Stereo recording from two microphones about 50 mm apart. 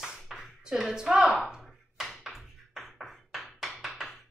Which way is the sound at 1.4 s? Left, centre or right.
Centre.